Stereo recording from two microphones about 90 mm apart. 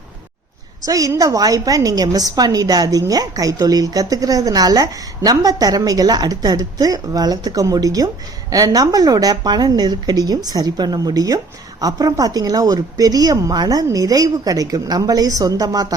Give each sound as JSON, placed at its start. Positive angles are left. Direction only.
{"t": 0.8, "sound": "a woman's voice", "side_deg": -40}